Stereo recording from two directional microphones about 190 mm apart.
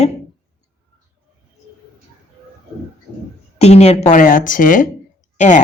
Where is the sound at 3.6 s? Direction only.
35° left (ahead or behind).